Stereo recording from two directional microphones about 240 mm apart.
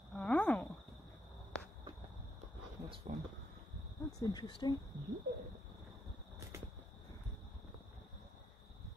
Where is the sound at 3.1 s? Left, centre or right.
Right.